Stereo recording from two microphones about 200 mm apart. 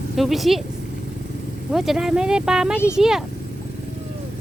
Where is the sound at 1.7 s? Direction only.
Centre (ahead or behind).